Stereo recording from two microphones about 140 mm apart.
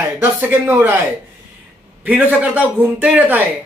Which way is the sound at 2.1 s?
10° right (ahead or behind).